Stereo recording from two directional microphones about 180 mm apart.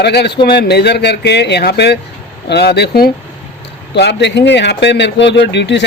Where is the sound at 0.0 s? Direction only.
65° left (ahead or behind).